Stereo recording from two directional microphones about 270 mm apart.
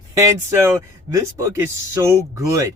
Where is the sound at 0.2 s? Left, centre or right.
Centre.